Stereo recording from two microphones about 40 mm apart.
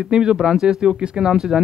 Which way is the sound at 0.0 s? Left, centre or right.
Centre.